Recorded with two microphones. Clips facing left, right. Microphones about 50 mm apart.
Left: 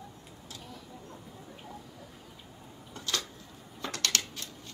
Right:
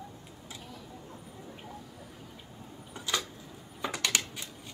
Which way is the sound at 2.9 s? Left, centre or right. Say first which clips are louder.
Right 2 dB; centre.